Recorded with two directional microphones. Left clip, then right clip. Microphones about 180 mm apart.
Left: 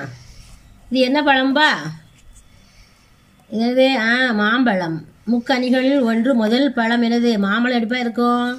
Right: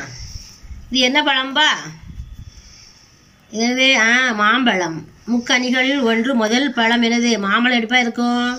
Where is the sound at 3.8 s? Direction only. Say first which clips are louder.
Right 4 dB; 50° left (ahead or behind).